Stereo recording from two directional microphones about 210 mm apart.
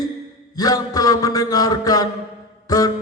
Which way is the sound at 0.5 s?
20° left (ahead or behind).